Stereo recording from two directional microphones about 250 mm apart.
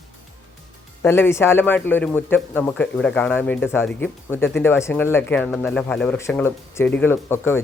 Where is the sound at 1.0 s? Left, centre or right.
Centre.